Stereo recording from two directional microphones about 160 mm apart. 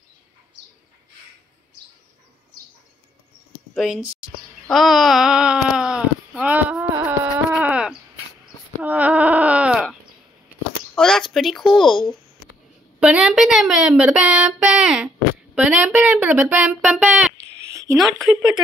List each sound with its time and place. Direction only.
3.7 s speech: centre (ahead or behind)
4.6 s a sound: centre (ahead or behind)
8.8 s bleat: 10° right (ahead or behind)
11.0 s a woman's voice: 5° left (ahead or behind)
17.6 s a sound: 20° right (ahead or behind)
17.9 s a woman's voice: centre (ahead or behind)